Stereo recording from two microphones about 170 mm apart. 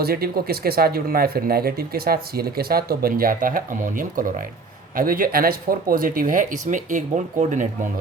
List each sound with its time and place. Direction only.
0.0 s speech: 65° right (ahead or behind); by 7.7 s 50° right (ahead or behind)